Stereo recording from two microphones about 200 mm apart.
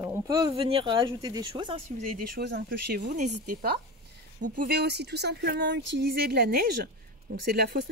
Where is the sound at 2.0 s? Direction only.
45° right (ahead or behind).